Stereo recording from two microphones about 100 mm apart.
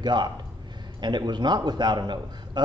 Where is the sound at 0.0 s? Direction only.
45° right (ahead or behind).